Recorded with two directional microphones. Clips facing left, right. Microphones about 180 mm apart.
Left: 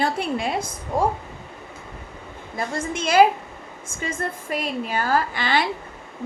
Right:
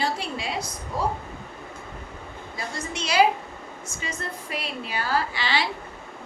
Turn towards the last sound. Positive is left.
turn(degrees=50)  # may be behind; listen again after turning